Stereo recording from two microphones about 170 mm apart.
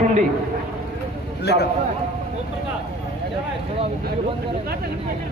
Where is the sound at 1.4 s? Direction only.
70° left (ahead or behind).